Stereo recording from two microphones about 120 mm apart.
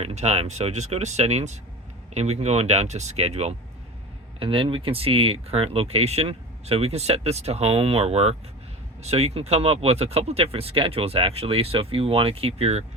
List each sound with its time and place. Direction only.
0.0 s speech: 65° right (ahead or behind)
4.4 s speech: 45° right (ahead or behind)